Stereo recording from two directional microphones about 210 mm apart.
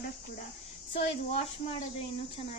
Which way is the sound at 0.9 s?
30° left (ahead or behind).